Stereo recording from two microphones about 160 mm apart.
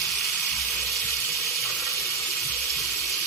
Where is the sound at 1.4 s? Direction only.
20° left (ahead or behind).